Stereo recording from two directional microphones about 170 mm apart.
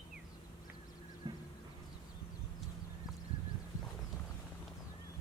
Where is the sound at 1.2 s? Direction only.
25° right (ahead or behind).